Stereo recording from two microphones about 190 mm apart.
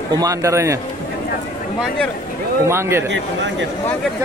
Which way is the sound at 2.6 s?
15° right (ahead or behind).